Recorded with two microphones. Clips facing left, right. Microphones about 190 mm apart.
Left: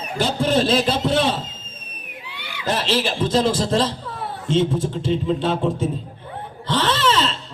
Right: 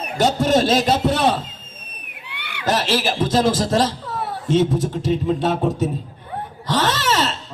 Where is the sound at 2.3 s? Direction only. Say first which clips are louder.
Right 3 dB; 65° right (ahead or behind).